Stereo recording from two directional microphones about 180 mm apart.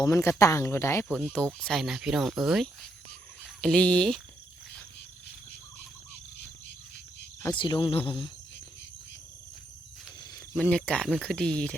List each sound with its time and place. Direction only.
0.0 s speech: 15° left (ahead or behind)
7.4 s speech: 25° left (ahead or behind)
10.5 s speech: 5° left (ahead or behind)